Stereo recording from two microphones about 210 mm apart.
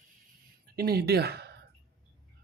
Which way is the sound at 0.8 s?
45° right (ahead or behind).